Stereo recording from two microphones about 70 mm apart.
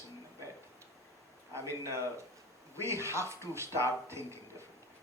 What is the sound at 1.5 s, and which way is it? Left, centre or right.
Speech, right.